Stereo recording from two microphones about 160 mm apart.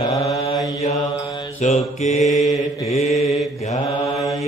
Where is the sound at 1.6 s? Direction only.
45° left (ahead or behind).